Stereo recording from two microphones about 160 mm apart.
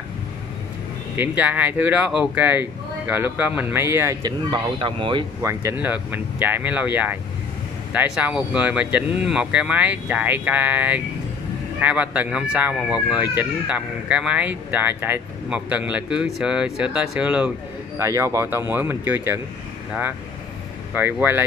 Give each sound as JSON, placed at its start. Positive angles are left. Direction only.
{"t": 1.1, "sound": "speech", "side_deg": -10}
{"t": 5.4, "sound": "speech", "side_deg": -15}
{"t": 17.9, "sound": "speech", "side_deg": -20}
{"t": 20.9, "sound": "speech", "side_deg": -10}